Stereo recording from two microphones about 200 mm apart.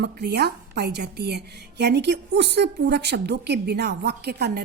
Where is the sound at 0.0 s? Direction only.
55° right (ahead or behind).